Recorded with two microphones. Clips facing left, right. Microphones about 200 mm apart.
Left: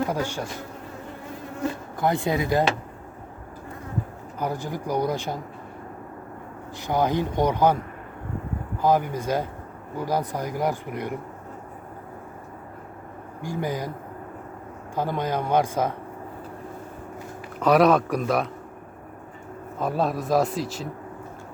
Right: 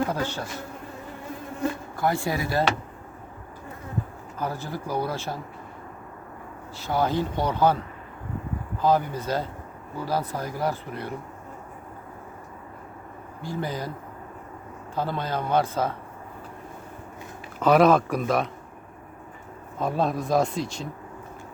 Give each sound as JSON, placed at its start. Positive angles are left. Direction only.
{"t": 0.1, "sound": "speech", "side_deg": 15}
{"t": 2.0, "sound": "speech", "side_deg": 20}
{"t": 4.4, "sound": "speech", "side_deg": 15}
{"t": 6.7, "sound": "speech", "side_deg": 15}
{"t": 13.4, "sound": "speech", "side_deg": 15}
{"t": 14.9, "sound": "speech", "side_deg": 15}
{"t": 17.6, "sound": "speech", "side_deg": 0}
{"t": 19.8, "sound": "speech", "side_deg": 0}